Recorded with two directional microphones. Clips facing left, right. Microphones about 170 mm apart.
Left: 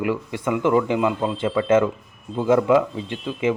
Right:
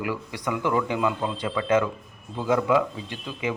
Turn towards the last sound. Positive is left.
turn(degrees=25)  # may be behind; listen again after turning